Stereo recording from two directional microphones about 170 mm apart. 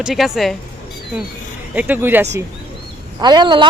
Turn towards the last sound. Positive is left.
turn(degrees=-25)  # may be behind; listen again after turning